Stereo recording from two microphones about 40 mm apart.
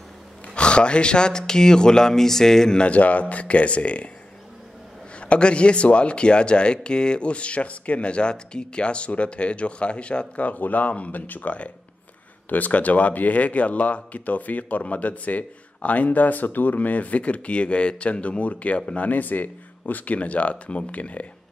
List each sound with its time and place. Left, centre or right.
0.6 s speech: left
2.8 s speech: left
5.2 s speech: left